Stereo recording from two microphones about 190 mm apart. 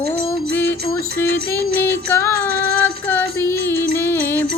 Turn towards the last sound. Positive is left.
turn(degrees=10)  # may be behind; listen again after turning